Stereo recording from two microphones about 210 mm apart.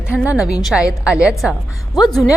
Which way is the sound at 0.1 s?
5° right (ahead or behind).